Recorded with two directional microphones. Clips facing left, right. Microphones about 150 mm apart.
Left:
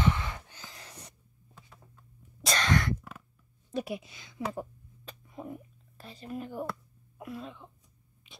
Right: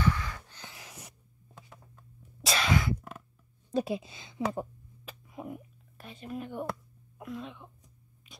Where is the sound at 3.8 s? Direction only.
30° right (ahead or behind).